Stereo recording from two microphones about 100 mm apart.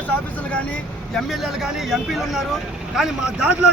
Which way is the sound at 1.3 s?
Centre (ahead or behind).